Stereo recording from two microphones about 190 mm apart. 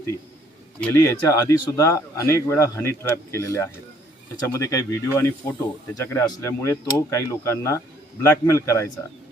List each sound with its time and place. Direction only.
0.8 s speech: 15° left (ahead or behind)